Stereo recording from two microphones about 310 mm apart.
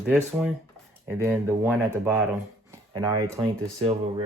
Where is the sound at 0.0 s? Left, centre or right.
Centre.